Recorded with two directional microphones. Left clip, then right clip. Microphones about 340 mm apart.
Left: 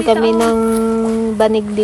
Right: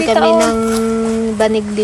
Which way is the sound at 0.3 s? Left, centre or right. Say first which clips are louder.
Right 2 dB; centre.